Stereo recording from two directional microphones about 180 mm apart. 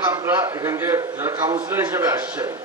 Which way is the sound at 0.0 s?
15° right (ahead or behind).